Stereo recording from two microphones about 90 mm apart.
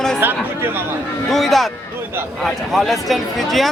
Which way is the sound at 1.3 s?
Centre (ahead or behind).